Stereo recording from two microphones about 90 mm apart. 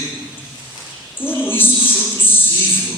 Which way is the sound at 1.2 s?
20° left (ahead or behind).